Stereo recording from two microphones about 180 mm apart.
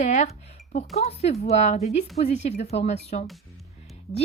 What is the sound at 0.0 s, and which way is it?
A woman's voice, 40° left (ahead or behind).